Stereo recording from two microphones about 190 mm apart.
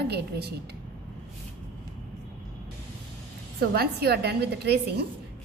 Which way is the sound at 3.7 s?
55° right (ahead or behind).